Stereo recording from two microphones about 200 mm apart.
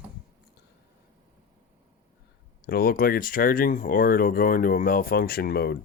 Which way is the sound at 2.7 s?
50° left (ahead or behind).